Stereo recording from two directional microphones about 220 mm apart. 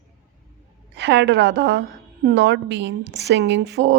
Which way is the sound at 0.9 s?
50° right (ahead or behind).